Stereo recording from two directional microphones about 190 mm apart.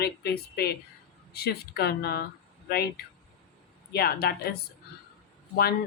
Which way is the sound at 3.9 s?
55° left (ahead or behind).